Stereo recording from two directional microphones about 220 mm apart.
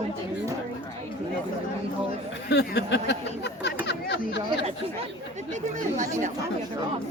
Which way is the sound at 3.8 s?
50° left (ahead or behind).